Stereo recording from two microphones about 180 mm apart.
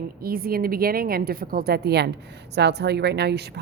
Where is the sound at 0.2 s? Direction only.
55° right (ahead or behind).